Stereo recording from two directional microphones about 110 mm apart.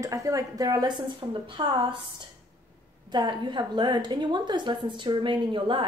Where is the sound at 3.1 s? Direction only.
45° right (ahead or behind).